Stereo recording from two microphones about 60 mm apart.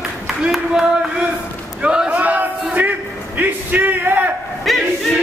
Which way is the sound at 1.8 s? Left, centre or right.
Centre.